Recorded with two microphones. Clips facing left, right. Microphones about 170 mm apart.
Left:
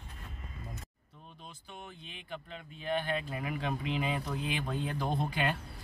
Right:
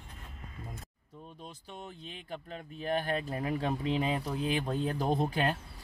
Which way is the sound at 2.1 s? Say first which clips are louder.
Right 2 dB; 40° right (ahead or behind).